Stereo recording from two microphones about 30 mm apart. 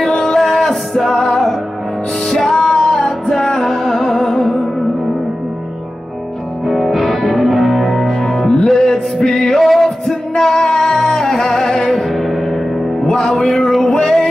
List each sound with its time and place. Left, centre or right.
0.0 s music: left
6.7 s music: centre
8.1 s music: centre
12.1 s music: centre
13.0 s music: left
13.3 s a sound: centre